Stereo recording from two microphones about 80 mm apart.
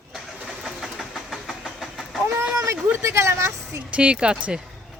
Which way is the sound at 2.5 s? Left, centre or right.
Right.